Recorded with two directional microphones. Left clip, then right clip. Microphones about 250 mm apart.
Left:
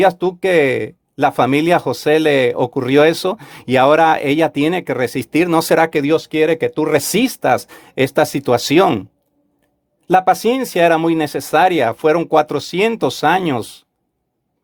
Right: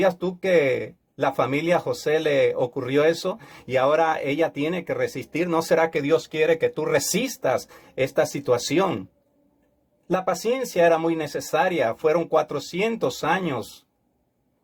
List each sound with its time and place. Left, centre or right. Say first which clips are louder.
0.0 s speech: left 8 dB; left
10.1 s speech: left 11 dB; left